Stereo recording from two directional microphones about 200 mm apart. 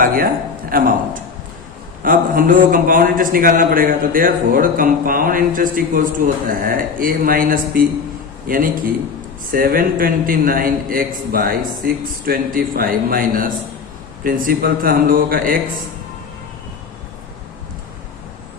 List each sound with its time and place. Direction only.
0.0 s a man's voice: 45° right (ahead or behind)